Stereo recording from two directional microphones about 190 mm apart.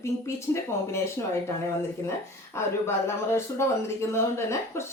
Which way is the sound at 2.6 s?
15° left (ahead or behind).